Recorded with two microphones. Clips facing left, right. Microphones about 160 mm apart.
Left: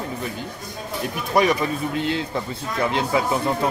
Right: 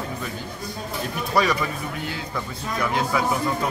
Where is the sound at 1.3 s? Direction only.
20° left (ahead or behind).